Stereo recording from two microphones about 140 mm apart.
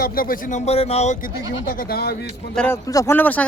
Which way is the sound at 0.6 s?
45° left (ahead or behind).